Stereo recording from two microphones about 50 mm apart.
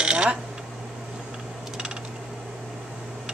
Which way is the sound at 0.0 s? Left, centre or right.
Centre.